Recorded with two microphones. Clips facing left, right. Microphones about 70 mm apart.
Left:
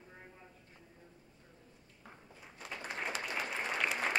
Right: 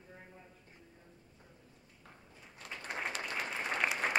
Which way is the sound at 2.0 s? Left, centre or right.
Centre.